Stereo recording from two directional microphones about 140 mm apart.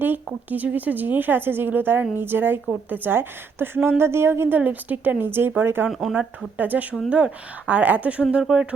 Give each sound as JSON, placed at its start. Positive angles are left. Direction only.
{"t": 0.3, "sound": "a woman's voice", "side_deg": -10}
{"t": 5.9, "sound": "speech", "side_deg": 0}
{"t": 6.6, "sound": "a woman's voice", "side_deg": -10}